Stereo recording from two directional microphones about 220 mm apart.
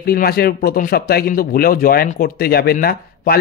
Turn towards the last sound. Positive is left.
turn(degrees=40)  # may be behind; listen again after turning